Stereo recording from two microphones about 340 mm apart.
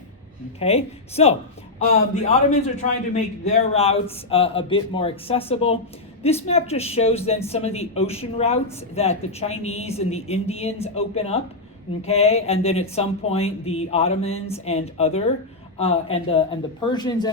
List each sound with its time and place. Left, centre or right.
0.6 s a man's voice: centre